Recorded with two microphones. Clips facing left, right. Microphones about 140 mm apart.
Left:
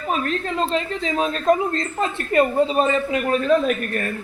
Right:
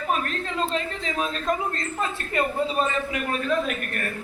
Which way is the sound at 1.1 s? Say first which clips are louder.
Left 8 dB; 25° left (ahead or behind).